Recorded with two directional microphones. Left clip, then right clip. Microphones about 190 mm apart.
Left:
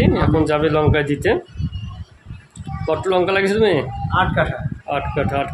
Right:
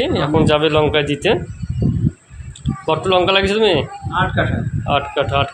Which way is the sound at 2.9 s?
10° left (ahead or behind).